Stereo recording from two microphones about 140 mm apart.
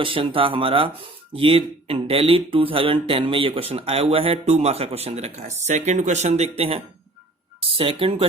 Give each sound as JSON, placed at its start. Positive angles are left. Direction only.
{"t": 0.0, "sound": "speech", "side_deg": -40}
{"t": 7.8, "sound": "speech", "side_deg": -40}